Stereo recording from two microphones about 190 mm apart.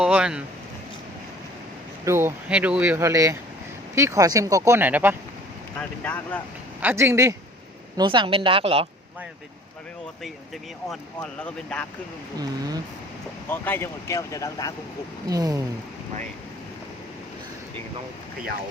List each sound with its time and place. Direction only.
0.0 s speech: 5° right (ahead or behind)
2.0 s speech: 10° right (ahead or behind)
6.0 s speech: 10° left (ahead or behind)
6.8 s speech: 15° right (ahead or behind); by 8.9 s 30° right (ahead or behind)
10.8 s speech: 5° left (ahead or behind)
12.4 s speech: 20° right (ahead or behind)
13.5 s speech: 10° left (ahead or behind)
15.3 s speech: 20° right (ahead or behind)